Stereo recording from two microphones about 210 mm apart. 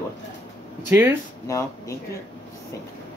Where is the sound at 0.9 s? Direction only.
10° right (ahead or behind).